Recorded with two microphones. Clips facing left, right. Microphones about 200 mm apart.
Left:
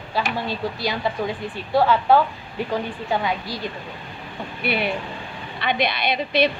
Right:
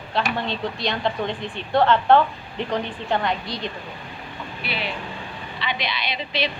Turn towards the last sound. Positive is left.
turn(degrees=55)  # may be behind; listen again after turning